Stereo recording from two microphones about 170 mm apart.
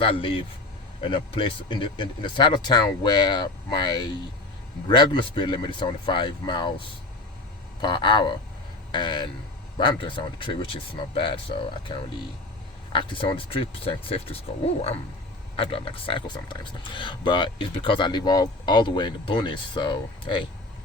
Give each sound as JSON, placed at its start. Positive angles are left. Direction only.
{"t": 0.0, "sound": "speech", "side_deg": 30}
{"t": 15.5, "sound": "speech", "side_deg": 35}